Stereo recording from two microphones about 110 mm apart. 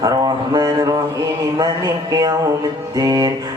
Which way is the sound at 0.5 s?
35° right (ahead or behind).